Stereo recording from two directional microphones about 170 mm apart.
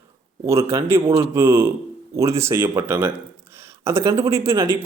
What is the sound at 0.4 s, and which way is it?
Speech, 15° right (ahead or behind).